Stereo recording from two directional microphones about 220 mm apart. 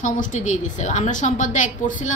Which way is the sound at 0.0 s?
35° left (ahead or behind).